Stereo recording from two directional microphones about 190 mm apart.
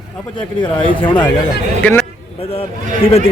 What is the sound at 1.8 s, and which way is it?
Speech, 5° left (ahead or behind).